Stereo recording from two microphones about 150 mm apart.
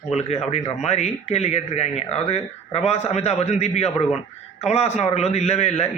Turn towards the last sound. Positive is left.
turn(degrees=45)  # may be behind; listen again after turning